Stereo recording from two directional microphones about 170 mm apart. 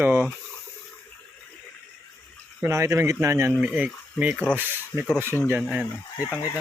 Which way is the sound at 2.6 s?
15° right (ahead or behind).